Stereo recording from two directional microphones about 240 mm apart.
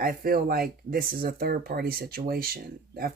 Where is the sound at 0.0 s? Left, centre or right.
Right.